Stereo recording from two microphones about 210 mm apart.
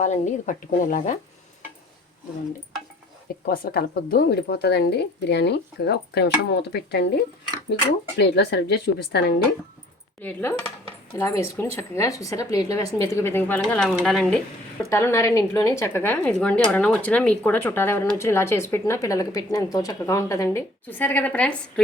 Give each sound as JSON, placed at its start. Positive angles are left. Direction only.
{"t": 0.0, "sound": "speech", "side_deg": 35}
{"t": 3.4, "sound": "speech", "side_deg": 45}
{"t": 8.2, "sound": "speech", "side_deg": 50}
{"t": 10.2, "sound": "speech", "side_deg": 10}
{"t": 14.8, "sound": "speech", "side_deg": 15}